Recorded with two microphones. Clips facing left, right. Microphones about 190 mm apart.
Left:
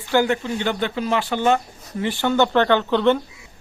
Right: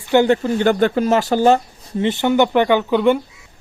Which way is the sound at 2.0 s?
20° right (ahead or behind).